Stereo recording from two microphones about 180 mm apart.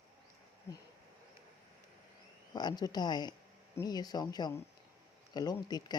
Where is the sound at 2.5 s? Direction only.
25° left (ahead or behind).